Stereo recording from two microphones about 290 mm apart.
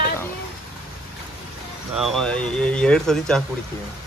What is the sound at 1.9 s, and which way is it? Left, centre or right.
Speech, centre.